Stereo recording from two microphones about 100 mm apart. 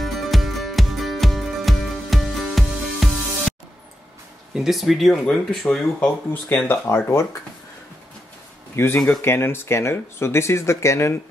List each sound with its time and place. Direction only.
0.0 s music: centre (ahead or behind)
4.6 s speech: centre (ahead or behind)
5.9 s speech: 15° left (ahead or behind)
8.7 s speech: 25° left (ahead or behind)